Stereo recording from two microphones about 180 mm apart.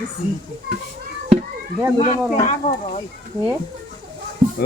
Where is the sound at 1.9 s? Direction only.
40° left (ahead or behind).